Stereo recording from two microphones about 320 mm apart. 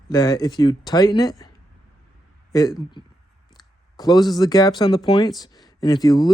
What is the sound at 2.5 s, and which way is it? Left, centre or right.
Speech, centre.